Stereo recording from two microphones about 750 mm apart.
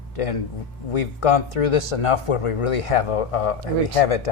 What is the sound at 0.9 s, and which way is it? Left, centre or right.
Speech, left.